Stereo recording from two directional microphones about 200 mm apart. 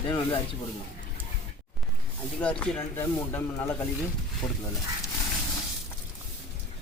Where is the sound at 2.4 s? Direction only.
5° left (ahead or behind).